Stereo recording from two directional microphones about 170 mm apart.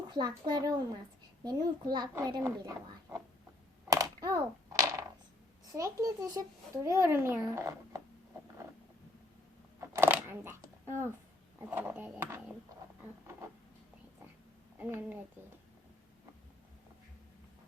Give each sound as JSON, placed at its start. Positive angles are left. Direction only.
{"t": 0.1, "sound": "a child's voice", "side_deg": -25}
{"t": 3.8, "sound": "a sound", "side_deg": -20}
{"t": 5.7, "sound": "a child's voice", "side_deg": -20}
{"t": 9.8, "sound": "shuffling cards", "side_deg": -15}
{"t": 11.6, "sound": "a child's voice", "side_deg": -10}
{"t": 13.0, "sound": "a sound", "side_deg": -15}
{"t": 14.8, "sound": "a child's voice", "side_deg": -10}